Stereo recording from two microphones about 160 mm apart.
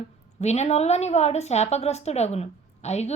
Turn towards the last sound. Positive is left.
turn(degrees=40)  # may be behind; listen again after turning